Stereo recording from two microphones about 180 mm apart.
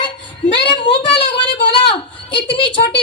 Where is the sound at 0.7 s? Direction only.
25° left (ahead or behind).